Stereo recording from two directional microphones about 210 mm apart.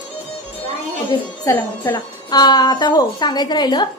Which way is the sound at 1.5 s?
10° left (ahead or behind).